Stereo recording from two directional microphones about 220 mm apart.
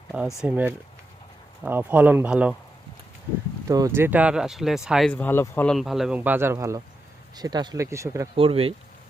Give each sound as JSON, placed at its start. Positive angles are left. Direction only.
{"t": 0.4, "sound": "speech", "side_deg": -5}
{"t": 3.7, "sound": "speech", "side_deg": -15}
{"t": 8.4, "sound": "speech", "side_deg": -25}